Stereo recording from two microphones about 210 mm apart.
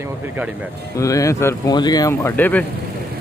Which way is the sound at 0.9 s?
15° left (ahead or behind).